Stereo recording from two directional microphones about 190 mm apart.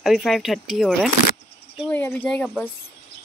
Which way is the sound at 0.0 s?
Centre (ahead or behind).